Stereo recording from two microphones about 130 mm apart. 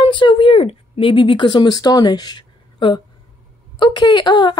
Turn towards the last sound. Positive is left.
turn(degrees=35)  # may be behind; listen again after turning